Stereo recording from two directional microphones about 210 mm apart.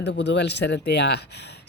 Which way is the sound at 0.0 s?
55° left (ahead or behind).